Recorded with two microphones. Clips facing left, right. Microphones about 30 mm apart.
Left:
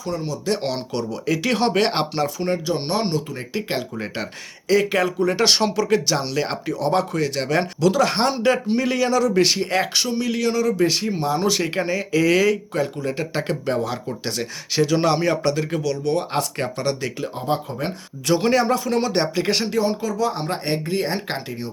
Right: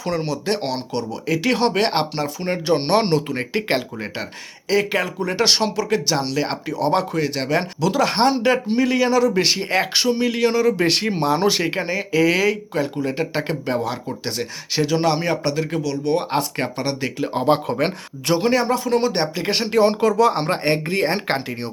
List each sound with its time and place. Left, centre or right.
0.0 s speech: right
0.6 s speech: centre
2.6 s speech: right
3.9 s speech: centre
10.8 s speech: right
11.3 s speech: right; by 16.1 s centre
16.1 s speech: centre
17.3 s speech: right
18.3 s speech: centre
19.7 s speech: right
20.5 s speech: right